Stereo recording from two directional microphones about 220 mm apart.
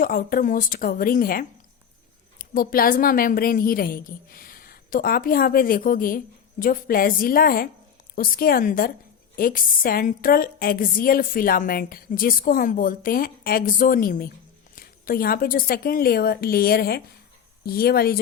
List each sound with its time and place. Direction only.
0.0 s a woman's voice: 40° left (ahead or behind)